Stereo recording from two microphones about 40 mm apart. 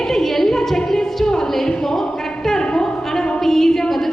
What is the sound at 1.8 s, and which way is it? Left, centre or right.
Speech, centre.